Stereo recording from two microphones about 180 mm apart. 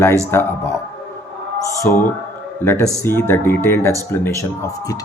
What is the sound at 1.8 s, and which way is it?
Speech, 15° left (ahead or behind).